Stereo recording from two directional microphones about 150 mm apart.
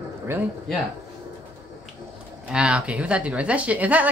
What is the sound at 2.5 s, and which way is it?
A woman's voice, 5° right (ahead or behind).